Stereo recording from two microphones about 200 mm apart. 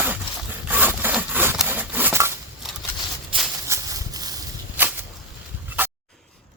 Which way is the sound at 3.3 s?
25° right (ahead or behind).